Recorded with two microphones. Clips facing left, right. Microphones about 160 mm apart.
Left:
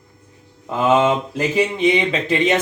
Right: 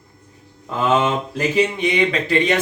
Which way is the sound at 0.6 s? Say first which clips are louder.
Left 3 dB; 20° left (ahead or behind).